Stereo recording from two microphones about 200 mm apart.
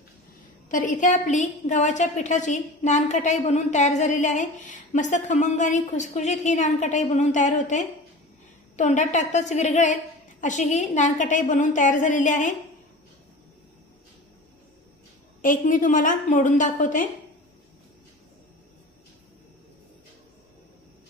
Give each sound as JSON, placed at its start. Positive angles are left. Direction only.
{"t": 0.7, "sound": "a woman's voice", "side_deg": 40}
{"t": 15.4, "sound": "a woman's voice", "side_deg": 40}